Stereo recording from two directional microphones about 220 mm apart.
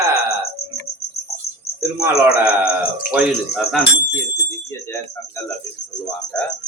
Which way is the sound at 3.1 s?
Centre (ahead or behind).